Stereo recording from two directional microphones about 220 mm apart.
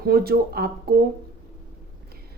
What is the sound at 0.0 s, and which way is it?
Speech, 45° right (ahead or behind).